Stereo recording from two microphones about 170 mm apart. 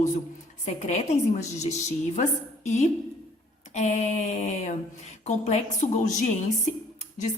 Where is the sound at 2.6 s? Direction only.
40° left (ahead or behind).